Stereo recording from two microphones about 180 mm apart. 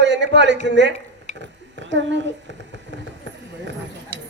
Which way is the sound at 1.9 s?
85° right.